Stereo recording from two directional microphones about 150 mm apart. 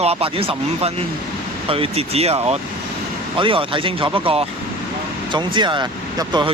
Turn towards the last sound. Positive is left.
turn(degrees=-30)  # may be behind; listen again after turning